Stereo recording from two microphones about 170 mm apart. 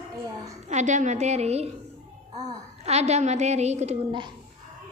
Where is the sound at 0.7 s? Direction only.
45° right (ahead or behind).